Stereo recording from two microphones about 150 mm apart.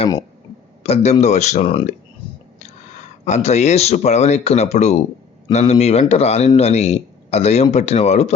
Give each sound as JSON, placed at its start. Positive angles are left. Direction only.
{"t": 0.8, "sound": "speech", "side_deg": 45}
{"t": 2.6, "sound": "speech", "side_deg": 50}